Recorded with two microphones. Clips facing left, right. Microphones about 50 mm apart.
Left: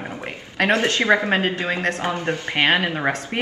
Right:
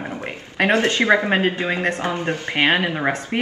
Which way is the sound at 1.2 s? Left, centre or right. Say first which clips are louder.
Right 2 dB; centre.